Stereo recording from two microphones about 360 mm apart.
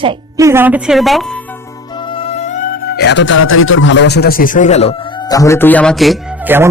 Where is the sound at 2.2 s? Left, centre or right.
Centre.